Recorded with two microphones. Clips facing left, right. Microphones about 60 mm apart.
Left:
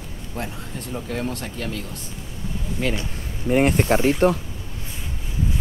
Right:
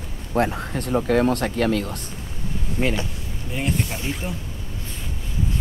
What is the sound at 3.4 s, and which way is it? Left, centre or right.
Speech, left.